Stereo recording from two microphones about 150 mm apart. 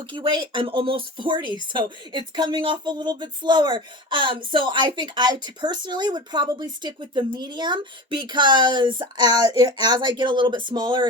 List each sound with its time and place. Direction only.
0.0 s speech: 30° right (ahead or behind)